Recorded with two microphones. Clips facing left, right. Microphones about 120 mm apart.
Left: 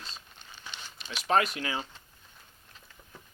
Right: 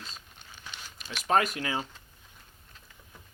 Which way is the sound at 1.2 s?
45° right (ahead or behind).